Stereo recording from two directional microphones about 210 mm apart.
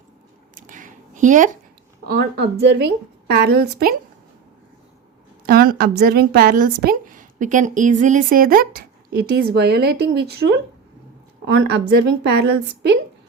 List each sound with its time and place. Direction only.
0.7 s a sound: 40° right (ahead or behind)
2.0 s a woman's voice: 50° right (ahead or behind)
5.5 s a woman's voice: 45° right (ahead or behind)